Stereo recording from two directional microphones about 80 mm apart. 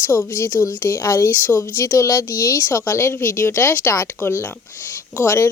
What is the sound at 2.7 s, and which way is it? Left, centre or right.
A woman's voice, left.